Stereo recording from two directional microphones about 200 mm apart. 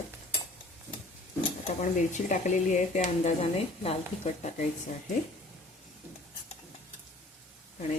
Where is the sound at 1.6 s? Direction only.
40° left (ahead or behind).